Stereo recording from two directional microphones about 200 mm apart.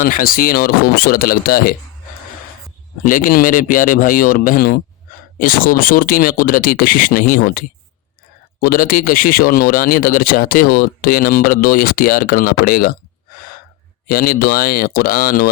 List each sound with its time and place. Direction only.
0.0 s speech: 45° left (ahead or behind)
3.0 s speech: 45° left (ahead or behind)
14.1 s speech: 45° left (ahead or behind)